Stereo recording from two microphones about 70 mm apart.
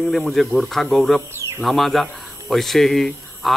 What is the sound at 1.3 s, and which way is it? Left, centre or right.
Bird, right.